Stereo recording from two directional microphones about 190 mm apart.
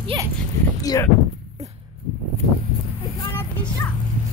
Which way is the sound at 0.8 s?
20° left (ahead or behind).